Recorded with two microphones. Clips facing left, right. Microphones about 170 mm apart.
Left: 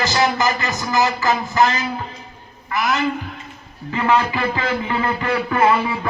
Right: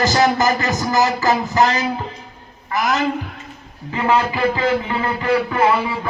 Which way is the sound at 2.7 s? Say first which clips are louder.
Right 1 dB; 40° right (ahead or behind).